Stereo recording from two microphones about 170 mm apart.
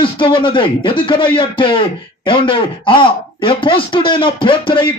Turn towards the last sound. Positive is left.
turn(degrees=30)  # may be behind; listen again after turning